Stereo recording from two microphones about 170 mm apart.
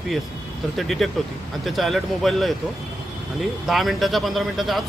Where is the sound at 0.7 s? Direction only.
Centre (ahead or behind).